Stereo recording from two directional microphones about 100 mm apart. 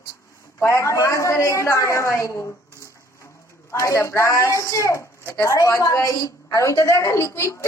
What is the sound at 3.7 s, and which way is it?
A woman's voice, 30° left (ahead or behind).